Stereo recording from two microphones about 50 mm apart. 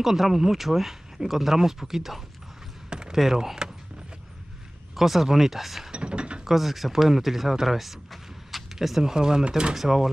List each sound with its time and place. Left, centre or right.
0.0 s speech: centre
2.9 s a sound: centre
3.2 s speech: centre
4.9 s speech: centre
5.9 s mechanisms: right
6.4 s speech: centre